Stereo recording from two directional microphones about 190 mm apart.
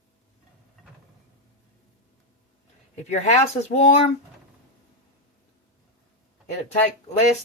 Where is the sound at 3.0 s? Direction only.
35° left (ahead or behind).